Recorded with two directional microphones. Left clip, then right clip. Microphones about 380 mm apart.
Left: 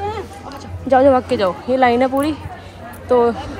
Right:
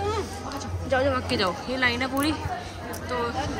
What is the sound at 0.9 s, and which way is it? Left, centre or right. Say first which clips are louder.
Speech: left 12 dB; centre.